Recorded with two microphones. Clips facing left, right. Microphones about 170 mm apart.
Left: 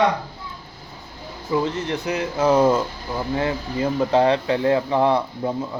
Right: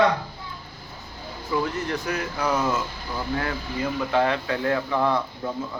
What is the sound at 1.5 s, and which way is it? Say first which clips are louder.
Speech: left 3 dB; 20° left (ahead or behind).